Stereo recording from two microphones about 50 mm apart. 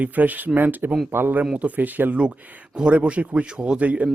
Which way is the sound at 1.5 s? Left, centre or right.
Right.